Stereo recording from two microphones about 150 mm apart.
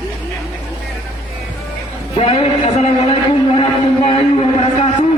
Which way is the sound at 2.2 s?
45° left (ahead or behind).